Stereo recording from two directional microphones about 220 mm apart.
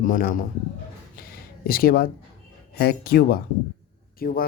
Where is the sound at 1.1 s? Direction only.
40° left (ahead or behind).